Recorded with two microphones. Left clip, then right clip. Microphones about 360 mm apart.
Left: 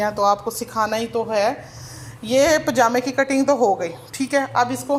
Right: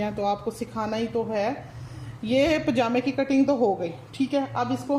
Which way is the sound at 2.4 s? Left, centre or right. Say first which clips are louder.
Left 7 dB; left.